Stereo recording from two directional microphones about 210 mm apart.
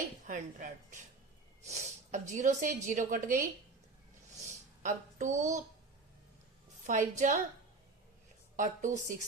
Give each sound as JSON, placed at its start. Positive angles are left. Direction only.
{"t": 0.3, "sound": "speech", "side_deg": -35}
{"t": 4.8, "sound": "speech", "side_deg": -35}
{"t": 6.8, "sound": "speech", "side_deg": -35}
{"t": 8.5, "sound": "speech", "side_deg": -35}